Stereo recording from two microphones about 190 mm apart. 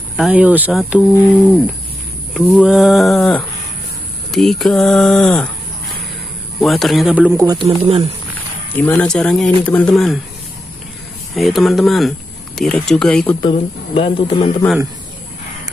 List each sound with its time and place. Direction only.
0.2 s speech: 5° right (ahead or behind)
2.3 s a sound: 5° left (ahead or behind)
2.6 s speech: 5° right (ahead or behind)
6.6 s speech: centre (ahead or behind)
7.4 s speech: 30° right (ahead or behind)
8.7 s speech: 10° left (ahead or behind)
11.3 s speech: centre (ahead or behind)
13.5 s speech: 30° left (ahead or behind)